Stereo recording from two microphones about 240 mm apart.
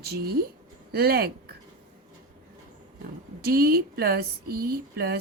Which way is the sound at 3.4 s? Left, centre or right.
Right.